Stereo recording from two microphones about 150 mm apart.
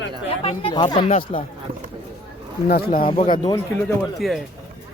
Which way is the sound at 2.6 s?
90° left.